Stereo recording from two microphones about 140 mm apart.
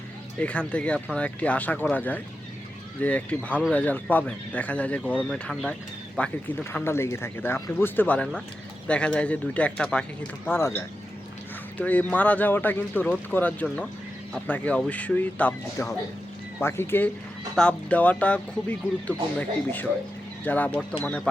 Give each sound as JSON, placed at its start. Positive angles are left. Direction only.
{"t": 0.3, "sound": "speech", "side_deg": 10}